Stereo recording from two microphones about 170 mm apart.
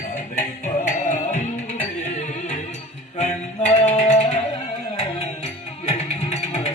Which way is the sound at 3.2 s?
40° left (ahead or behind).